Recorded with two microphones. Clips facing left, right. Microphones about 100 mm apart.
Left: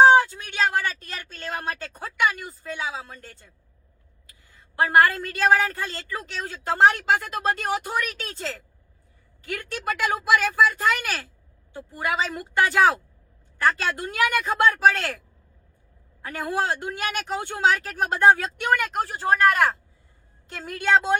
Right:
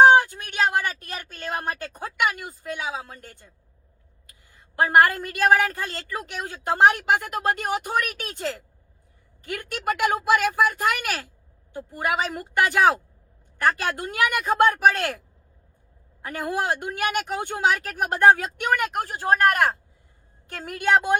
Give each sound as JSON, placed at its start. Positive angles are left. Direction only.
{"t": 0.0, "sound": "a sound", "side_deg": -15}
{"t": 1.0, "sound": "speech", "side_deg": -15}
{"t": 4.8, "sound": "speech", "side_deg": -15}
{"t": 16.2, "sound": "speech", "side_deg": -15}